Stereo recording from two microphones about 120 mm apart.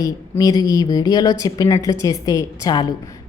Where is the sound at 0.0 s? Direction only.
30° left (ahead or behind).